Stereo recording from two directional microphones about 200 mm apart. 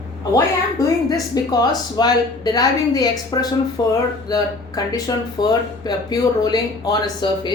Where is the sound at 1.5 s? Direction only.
20° left (ahead or behind).